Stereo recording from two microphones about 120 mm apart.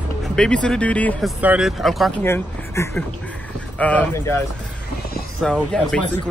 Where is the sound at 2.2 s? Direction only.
20° left (ahead or behind).